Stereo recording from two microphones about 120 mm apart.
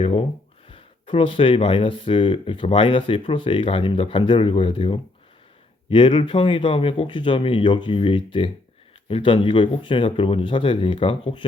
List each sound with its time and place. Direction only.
0.0 s speech: 55° left (ahead or behind)